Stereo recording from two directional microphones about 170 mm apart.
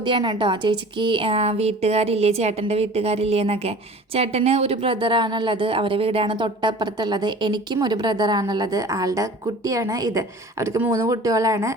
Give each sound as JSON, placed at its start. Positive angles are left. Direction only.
{"t": 0.0, "sound": "a woman's voice", "side_deg": -25}